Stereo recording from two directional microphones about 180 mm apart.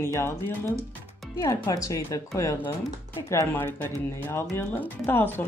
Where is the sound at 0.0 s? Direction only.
15° left (ahead or behind).